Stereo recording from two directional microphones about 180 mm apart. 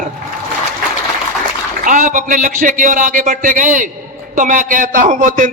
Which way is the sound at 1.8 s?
45° right (ahead or behind).